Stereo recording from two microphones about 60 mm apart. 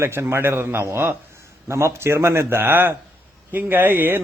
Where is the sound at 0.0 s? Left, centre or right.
Right.